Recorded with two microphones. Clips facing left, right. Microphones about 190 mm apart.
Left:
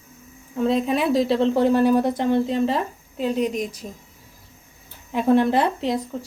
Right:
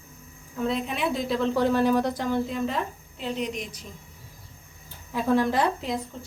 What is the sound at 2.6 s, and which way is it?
A woman's voice, 40° left (ahead or behind).